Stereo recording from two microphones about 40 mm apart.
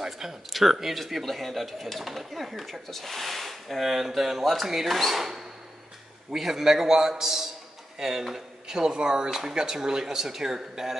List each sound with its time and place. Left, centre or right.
0.0 s speech: centre